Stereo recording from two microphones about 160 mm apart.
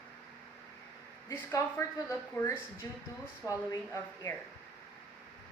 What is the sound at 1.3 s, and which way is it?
A woman's voice, 15° left (ahead or behind).